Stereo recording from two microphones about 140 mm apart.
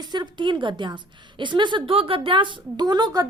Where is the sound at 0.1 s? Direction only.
35° right (ahead or behind).